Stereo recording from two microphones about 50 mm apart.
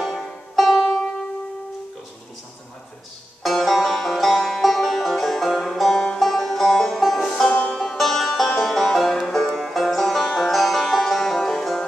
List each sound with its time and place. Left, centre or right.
0.0 s music: centre
3.4 s banjo: centre
5.6 s music: centre